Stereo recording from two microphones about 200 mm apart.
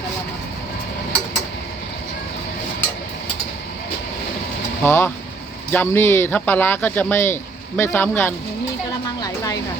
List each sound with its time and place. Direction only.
4.8 s speech: 10° left (ahead or behind)